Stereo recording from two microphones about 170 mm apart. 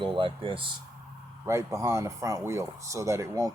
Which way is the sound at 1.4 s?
15° right (ahead or behind).